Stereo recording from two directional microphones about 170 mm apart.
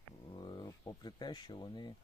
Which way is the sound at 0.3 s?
25° left (ahead or behind).